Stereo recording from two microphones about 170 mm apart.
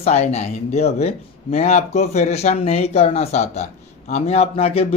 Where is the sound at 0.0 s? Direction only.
40° left (ahead or behind).